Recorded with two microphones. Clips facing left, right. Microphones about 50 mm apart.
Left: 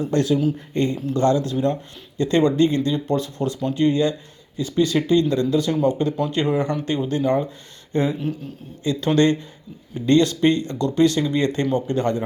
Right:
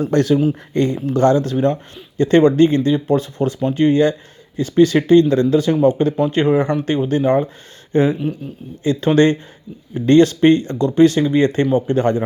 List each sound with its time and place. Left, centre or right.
0.1 s speech: right
0.7 s speech: right
0.9 s speech: right